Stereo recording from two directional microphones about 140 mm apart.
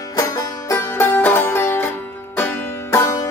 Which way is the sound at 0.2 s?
20° left (ahead or behind).